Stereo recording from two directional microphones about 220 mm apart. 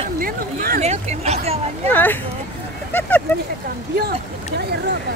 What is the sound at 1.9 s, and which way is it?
Speech, 10° left (ahead or behind).